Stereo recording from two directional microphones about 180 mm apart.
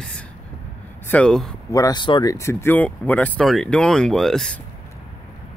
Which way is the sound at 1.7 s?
20° left (ahead or behind).